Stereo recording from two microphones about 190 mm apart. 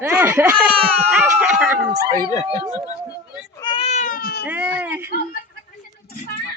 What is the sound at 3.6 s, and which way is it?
Cat, 25° left (ahead or behind).